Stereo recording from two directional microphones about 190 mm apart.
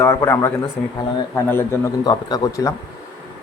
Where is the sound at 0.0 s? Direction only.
15° left (ahead or behind).